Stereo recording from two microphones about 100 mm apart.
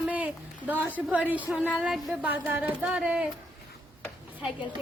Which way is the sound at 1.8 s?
5° right (ahead or behind).